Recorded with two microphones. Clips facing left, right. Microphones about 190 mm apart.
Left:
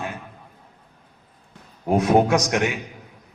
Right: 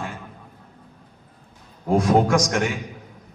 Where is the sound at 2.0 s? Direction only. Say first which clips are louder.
Left 1 dB; 20° left (ahead or behind).